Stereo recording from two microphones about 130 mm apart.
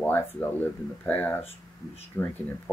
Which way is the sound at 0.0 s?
15° left (ahead or behind).